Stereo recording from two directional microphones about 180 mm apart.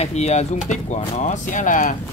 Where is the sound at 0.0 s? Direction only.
35° left (ahead or behind).